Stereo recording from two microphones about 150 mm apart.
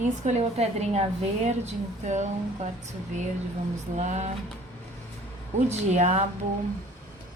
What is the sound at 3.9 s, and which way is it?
Speech, 50° right (ahead or behind).